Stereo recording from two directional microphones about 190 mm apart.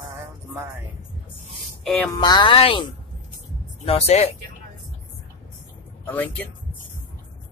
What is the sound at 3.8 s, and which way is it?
Speech, 35° left (ahead or behind).